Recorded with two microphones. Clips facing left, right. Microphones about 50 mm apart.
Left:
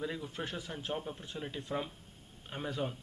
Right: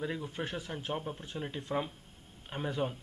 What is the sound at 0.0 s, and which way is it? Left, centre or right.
A man's voice, centre.